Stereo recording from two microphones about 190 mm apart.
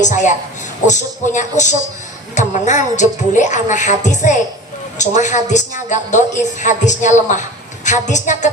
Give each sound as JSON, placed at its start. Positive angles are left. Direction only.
{"t": 0.0, "sound": "speech", "side_deg": 40}